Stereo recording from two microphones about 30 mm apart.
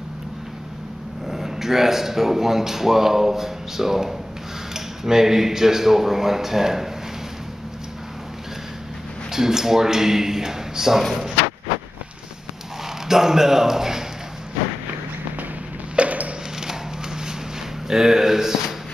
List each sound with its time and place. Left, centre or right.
1.2 s speech: centre
9.3 s speech: centre
13.1 s speech: centre
16.0 s a sound: right
17.8 s speech: centre